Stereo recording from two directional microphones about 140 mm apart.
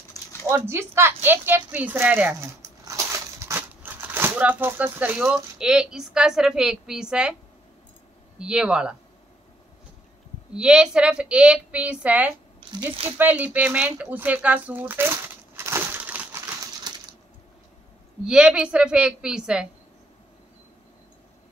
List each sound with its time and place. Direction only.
0.1 s a sound: 20° left (ahead or behind)
0.5 s speech: 20° right (ahead or behind)
8.4 s a woman's voice: 5° right (ahead or behind)
10.5 s a woman's voice: 5° right (ahead or behind)
12.5 s speech: 45° right (ahead or behind)
13.2 s speech: 10° right (ahead or behind)
16.9 s coin: 30° right (ahead or behind)
18.2 s a woman's voice: 5° right (ahead or behind)